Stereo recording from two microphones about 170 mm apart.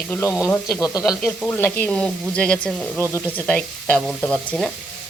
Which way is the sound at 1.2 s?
5° left (ahead or behind).